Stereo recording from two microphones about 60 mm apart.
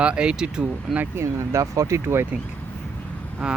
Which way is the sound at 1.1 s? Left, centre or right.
Right.